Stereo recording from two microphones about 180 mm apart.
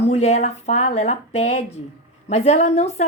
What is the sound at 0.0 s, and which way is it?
A woman's voice, 35° left (ahead or behind).